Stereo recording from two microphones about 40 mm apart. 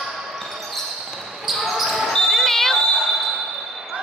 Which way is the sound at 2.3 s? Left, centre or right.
Centre.